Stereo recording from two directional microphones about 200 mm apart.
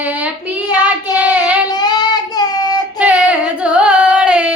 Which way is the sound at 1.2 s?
5° right (ahead or behind).